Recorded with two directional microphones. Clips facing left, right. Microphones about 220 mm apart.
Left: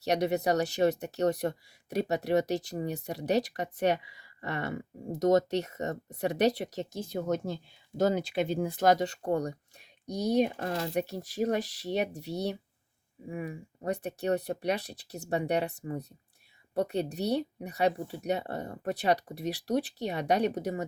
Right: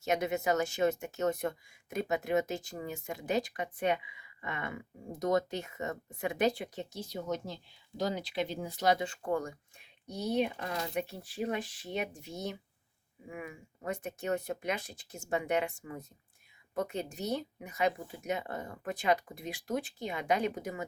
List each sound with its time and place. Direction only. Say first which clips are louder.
0.0 s speech: left 4 dB; 35° left (ahead or behind)
7.1 s speech: left 6 dB; 50° left (ahead or behind)